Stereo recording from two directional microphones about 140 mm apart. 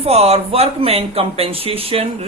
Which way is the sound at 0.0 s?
45° right (ahead or behind).